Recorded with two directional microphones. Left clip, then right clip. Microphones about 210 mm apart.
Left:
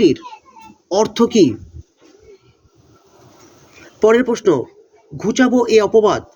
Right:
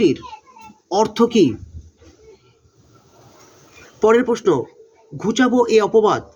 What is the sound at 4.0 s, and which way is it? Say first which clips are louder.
Speech: left 2 dB; 20° left (ahead or behind).